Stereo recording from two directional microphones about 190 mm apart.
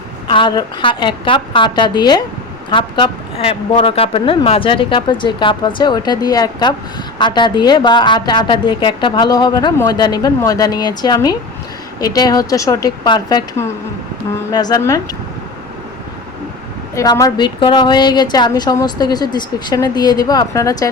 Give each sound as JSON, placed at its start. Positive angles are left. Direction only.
{"t": 0.3, "sound": "a woman's voice", "side_deg": 25}
{"t": 16.9, "sound": "a woman's voice", "side_deg": 15}